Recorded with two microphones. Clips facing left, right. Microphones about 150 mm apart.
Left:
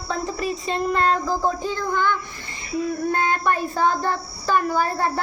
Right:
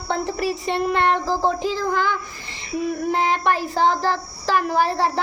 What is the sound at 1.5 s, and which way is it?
Speech, 90° right.